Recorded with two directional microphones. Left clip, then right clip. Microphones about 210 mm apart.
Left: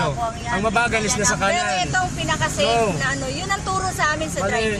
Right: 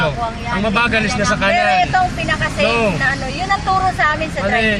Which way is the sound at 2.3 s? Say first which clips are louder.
Right 3 dB; 5° left (ahead or behind).